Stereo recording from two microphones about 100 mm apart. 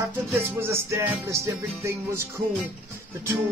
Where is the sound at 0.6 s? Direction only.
25° right (ahead or behind).